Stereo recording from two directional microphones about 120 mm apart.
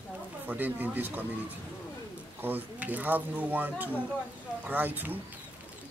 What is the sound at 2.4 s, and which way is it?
Speech, 15° right (ahead or behind).